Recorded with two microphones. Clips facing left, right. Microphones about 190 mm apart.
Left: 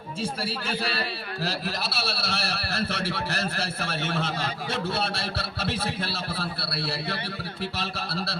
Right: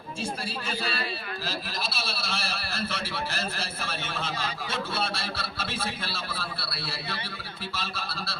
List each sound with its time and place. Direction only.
0.2 s a man's voice: 60° left (ahead or behind)